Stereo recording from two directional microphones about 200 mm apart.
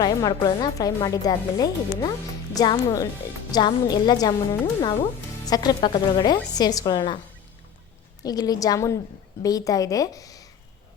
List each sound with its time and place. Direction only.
0.0 s a woman's voice: 20° left (ahead or behind)
8.2 s a woman's voice: 20° left (ahead or behind)